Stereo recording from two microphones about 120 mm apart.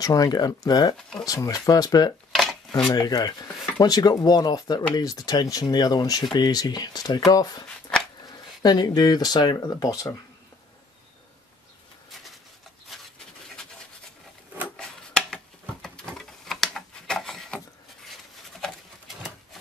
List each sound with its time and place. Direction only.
0.0 s speech: 30° left (ahead or behind)
8.6 s speech: 35° left (ahead or behind)
14.8 s a sound: 5° left (ahead or behind)